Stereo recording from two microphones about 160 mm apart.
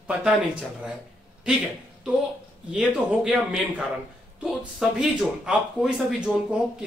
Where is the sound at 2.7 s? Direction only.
5° right (ahead or behind).